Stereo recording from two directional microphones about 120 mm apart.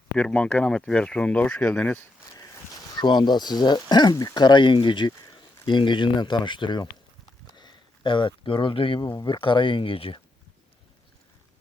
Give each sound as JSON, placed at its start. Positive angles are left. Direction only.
{"t": 0.2, "sound": "speech", "side_deg": 10}
{"t": 3.0, "sound": "speech", "side_deg": 35}
{"t": 7.5, "sound": "a sound", "side_deg": 40}
{"t": 9.0, "sound": "speech", "side_deg": 35}